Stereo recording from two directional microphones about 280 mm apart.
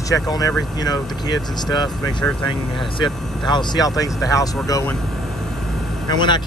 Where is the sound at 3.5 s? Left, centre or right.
Centre.